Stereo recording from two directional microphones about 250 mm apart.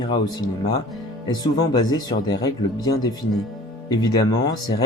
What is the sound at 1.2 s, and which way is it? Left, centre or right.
Speech, centre.